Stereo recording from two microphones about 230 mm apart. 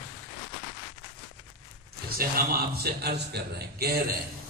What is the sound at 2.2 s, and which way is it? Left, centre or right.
A man's voice, right.